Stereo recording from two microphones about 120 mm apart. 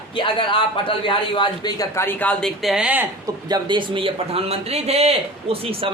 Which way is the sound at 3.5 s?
40° right (ahead or behind).